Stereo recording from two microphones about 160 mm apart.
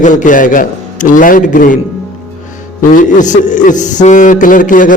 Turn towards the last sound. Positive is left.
turn(degrees=55)  # may be behind; listen again after turning